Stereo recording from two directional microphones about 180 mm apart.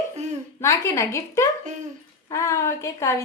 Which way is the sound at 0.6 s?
15° left (ahead or behind).